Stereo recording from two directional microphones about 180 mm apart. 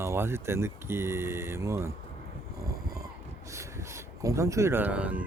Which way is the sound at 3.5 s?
15° right (ahead or behind).